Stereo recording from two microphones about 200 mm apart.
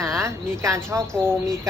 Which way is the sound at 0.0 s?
15° right (ahead or behind).